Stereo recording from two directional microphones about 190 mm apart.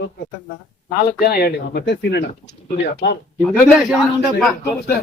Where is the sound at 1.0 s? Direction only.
50° left (ahead or behind).